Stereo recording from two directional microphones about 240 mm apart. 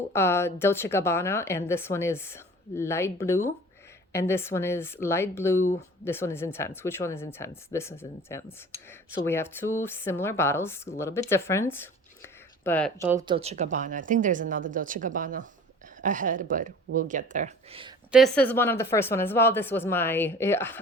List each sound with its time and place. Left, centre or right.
0.1 s speech: centre
12.2 s a sound: centre
13.0 s speech: centre
18.1 s speech: centre